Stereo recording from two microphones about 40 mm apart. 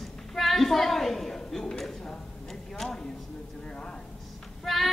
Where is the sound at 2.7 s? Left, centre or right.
Centre.